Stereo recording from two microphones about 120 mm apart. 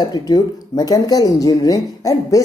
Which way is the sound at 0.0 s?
35° left (ahead or behind).